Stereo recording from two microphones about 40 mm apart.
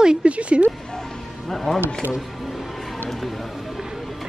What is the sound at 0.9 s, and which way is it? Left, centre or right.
Speech, centre.